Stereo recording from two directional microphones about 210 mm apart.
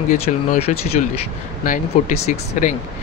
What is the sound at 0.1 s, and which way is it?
Speech, 35° left (ahead or behind).